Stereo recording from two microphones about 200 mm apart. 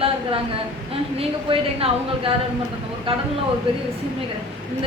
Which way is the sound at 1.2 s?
25° right (ahead or behind).